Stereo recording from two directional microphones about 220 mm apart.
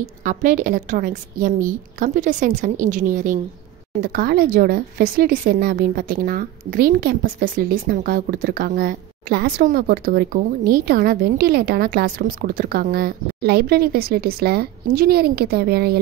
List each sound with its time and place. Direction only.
0.0 s a woman's voice: 35° right (ahead or behind)